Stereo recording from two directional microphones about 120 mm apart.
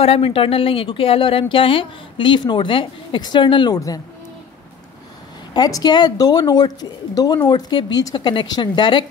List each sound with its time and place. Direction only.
0.0 s speech: 55° left (ahead or behind); by 4.0 s 30° left (ahead or behind)
5.5 s a woman's voice: 30° left (ahead or behind)